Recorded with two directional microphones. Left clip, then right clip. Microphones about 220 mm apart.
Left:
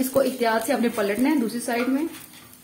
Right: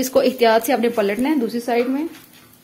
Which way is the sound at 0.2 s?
40° right (ahead or behind).